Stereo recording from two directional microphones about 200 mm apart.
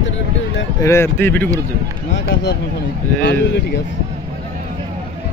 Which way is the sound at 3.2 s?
60° left (ahead or behind).